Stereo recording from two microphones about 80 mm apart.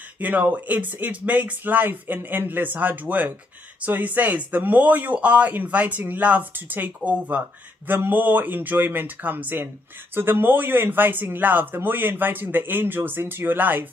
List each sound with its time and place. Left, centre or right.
0.2 s speech: right